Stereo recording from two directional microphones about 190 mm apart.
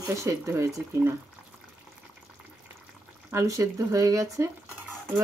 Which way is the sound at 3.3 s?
15° right (ahead or behind).